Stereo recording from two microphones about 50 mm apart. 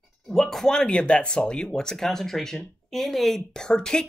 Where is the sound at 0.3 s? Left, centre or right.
Centre.